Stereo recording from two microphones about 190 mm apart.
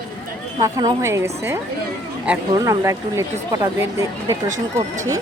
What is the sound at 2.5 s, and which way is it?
Speech, 15° right (ahead or behind).